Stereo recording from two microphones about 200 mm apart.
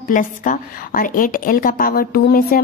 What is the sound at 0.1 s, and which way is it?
A woman's voice, 40° left (ahead or behind).